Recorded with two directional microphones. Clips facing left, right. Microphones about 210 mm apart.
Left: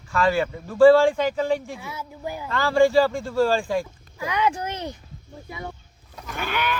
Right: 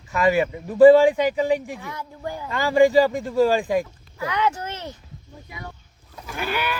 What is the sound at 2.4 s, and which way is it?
Speech, 15° right (ahead or behind).